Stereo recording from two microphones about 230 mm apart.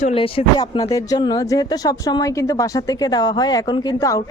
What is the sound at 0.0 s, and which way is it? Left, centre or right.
Speech, left.